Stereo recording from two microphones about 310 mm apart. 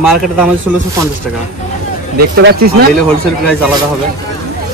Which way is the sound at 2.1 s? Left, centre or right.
Right.